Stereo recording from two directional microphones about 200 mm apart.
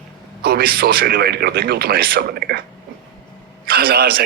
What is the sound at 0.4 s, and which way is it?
A man's voice, 50° right (ahead or behind).